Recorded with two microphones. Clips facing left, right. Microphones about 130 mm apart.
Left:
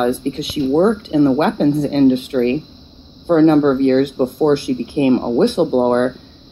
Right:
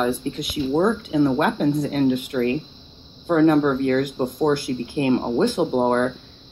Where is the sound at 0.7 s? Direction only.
30° left (ahead or behind).